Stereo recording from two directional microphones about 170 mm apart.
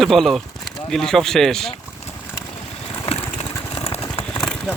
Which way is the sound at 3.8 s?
40° left (ahead or behind).